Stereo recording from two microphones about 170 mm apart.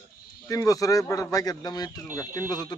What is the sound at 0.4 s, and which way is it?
Speech, 20° left (ahead or behind).